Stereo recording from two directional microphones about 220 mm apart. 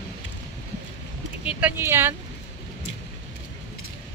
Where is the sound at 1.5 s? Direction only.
5° right (ahead or behind).